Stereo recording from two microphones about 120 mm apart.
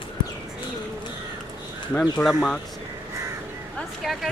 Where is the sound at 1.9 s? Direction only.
5° left (ahead or behind).